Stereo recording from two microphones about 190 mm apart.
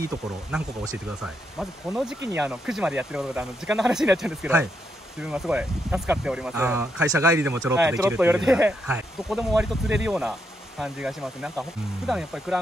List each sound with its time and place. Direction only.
0.5 s speech: 5° right (ahead or behind)